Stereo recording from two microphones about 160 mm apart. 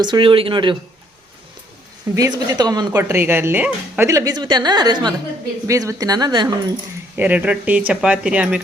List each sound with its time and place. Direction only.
0.0 s speech: 30° right (ahead or behind)
2.1 s speech: 20° right (ahead or behind)
3.0 s speech: 15° right (ahead or behind)
7.2 s speech: 10° right (ahead or behind)